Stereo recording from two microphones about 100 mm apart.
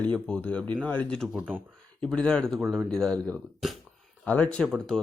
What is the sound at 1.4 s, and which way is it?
Speech, 15° right (ahead or behind).